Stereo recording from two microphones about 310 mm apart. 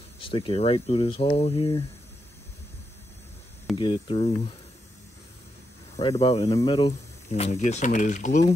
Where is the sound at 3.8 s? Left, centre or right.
Centre.